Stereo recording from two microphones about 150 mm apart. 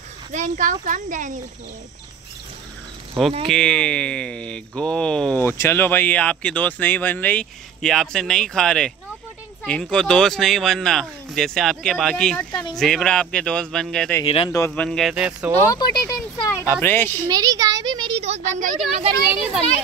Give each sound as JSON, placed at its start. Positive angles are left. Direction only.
{"t": 0.3, "sound": "a child's voice", "side_deg": -55}
{"t": 3.4, "sound": "speech", "side_deg": 5}
{"t": 14.2, "sound": "speech", "side_deg": 40}
{"t": 14.8, "sound": "speech", "side_deg": 5}
{"t": 15.6, "sound": "speech", "side_deg": 25}
{"t": 17.3, "sound": "a child's voice", "side_deg": -25}
{"t": 18.2, "sound": "a woman's voice", "side_deg": -50}
{"t": 19.3, "sound": "speech", "side_deg": -5}